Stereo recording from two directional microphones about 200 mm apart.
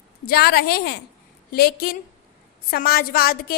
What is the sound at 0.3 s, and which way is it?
A woman's voice, 50° left (ahead or behind).